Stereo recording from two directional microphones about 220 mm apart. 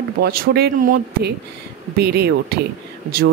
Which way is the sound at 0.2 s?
45° right (ahead or behind).